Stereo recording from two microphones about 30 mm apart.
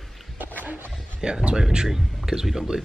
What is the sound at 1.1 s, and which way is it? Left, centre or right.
Speech, right.